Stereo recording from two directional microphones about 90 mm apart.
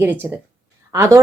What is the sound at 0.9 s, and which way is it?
Speech, 35° right (ahead or behind).